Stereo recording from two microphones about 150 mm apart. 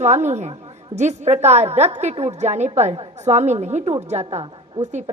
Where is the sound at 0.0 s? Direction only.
50° right (ahead or behind).